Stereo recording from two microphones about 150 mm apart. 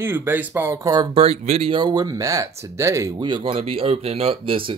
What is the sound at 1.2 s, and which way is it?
Speech, 40° right (ahead or behind).